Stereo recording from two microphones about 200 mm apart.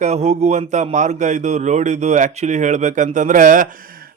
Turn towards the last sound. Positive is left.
turn(degrees=-40)  # may be behind; listen again after turning